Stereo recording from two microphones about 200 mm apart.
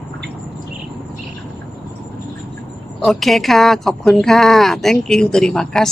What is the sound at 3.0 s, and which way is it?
Speech, centre (ahead or behind).